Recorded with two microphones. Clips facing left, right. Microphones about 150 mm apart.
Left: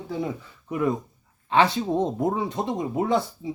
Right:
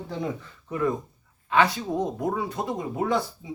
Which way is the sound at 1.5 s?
25° left (ahead or behind).